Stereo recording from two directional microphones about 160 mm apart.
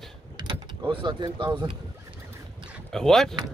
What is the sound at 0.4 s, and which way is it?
Mechanisms, 30° right (ahead or behind).